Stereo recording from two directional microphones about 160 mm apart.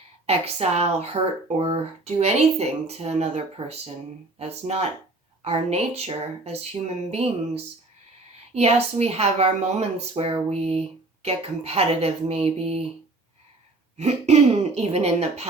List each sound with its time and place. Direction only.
0.3 s speech: 40° right (ahead or behind)
13.9 s speech: 45° right (ahead or behind)